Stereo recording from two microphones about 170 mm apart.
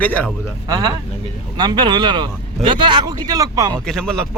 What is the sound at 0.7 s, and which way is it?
Speech, 20° right (ahead or behind).